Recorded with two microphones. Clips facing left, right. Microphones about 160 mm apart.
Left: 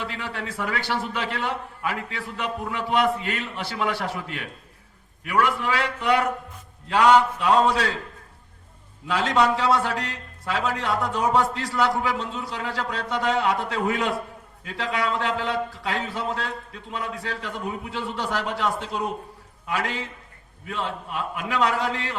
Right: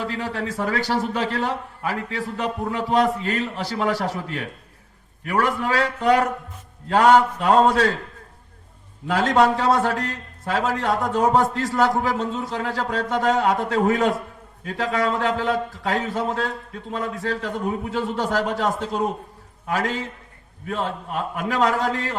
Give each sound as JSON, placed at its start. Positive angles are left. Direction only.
{"t": 0.0, "sound": "a man's voice", "side_deg": -40}
{"t": 9.0, "sound": "a man's voice", "side_deg": -45}